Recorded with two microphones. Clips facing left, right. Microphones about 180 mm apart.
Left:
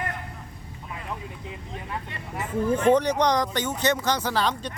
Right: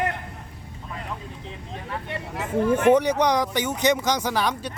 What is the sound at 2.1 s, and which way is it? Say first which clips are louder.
Speech: right 5 dB; 75° right (ahead or behind).